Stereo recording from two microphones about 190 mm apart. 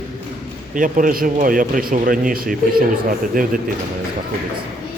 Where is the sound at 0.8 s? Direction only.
45° right (ahead or behind).